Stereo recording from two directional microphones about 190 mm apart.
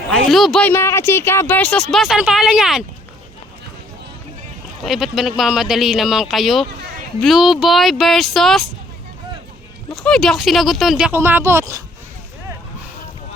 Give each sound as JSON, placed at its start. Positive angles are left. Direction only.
{"t": 0.1, "sound": "speech", "side_deg": 0}
{"t": 0.7, "sound": "speech", "side_deg": 15}
{"t": 4.8, "sound": "speech", "side_deg": 0}
{"t": 9.9, "sound": "speech", "side_deg": 5}